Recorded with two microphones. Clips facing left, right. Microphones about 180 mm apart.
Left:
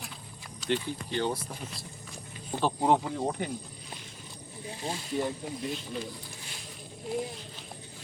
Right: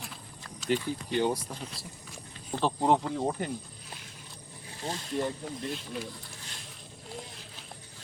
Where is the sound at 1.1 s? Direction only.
15° right (ahead or behind).